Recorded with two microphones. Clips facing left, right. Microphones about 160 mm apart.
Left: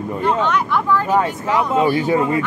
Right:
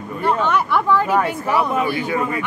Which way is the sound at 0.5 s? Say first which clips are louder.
Right 1 dB; 5° right (ahead or behind).